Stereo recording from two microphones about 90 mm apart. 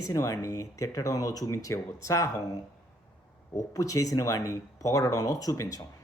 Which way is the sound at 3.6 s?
40° left (ahead or behind).